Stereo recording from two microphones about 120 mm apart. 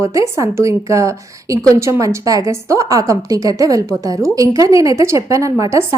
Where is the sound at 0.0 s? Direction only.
25° right (ahead or behind).